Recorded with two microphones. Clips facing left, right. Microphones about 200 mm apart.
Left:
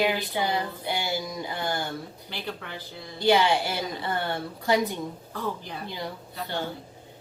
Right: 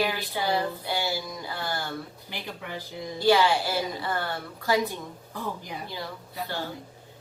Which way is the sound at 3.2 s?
20° left (ahead or behind).